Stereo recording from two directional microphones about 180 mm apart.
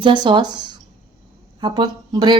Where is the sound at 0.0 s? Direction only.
25° right (ahead or behind).